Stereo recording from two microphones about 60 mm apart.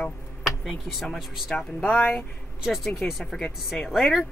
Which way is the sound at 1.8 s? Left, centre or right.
Left.